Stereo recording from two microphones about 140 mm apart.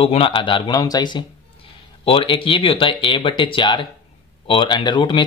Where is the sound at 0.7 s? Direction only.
25° left (ahead or behind).